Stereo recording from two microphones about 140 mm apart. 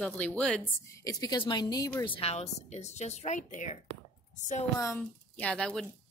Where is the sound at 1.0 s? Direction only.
25° left (ahead or behind).